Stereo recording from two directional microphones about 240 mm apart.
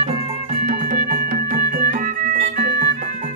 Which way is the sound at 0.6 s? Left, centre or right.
Right.